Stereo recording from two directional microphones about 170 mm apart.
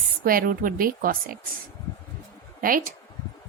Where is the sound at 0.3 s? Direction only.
60° right (ahead or behind).